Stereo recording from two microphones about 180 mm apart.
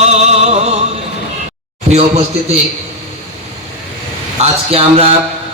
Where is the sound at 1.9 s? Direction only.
35° right (ahead or behind).